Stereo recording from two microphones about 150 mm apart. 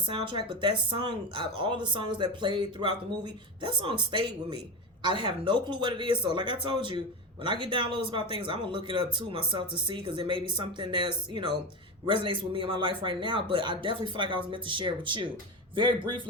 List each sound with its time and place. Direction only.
0.1 s speech: 35° right (ahead or behind)